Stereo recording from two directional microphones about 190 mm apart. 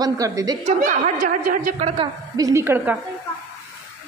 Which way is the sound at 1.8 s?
30° right (ahead or behind).